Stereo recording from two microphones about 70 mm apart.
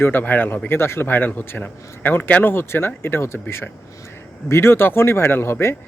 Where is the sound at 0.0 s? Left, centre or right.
Left.